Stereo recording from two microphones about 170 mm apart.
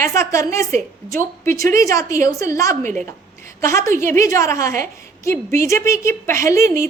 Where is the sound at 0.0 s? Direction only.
15° left (ahead or behind).